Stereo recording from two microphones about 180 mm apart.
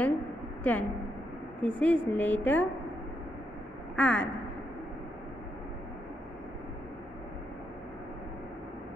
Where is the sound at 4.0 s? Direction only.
5° left (ahead or behind).